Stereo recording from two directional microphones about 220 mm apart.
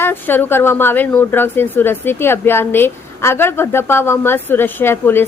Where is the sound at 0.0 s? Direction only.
10° left (ahead or behind).